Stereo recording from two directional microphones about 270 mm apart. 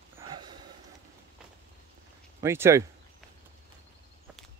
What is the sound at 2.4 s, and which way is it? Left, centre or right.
Speech, centre.